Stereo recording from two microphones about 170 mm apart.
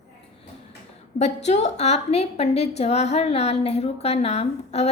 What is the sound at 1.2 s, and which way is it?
A woman's voice, 40° left (ahead or behind).